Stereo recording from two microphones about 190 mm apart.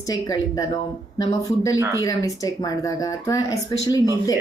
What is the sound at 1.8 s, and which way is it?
Speech, 15° right (ahead or behind).